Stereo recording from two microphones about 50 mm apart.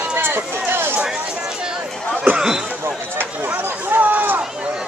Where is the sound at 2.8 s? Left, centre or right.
Right.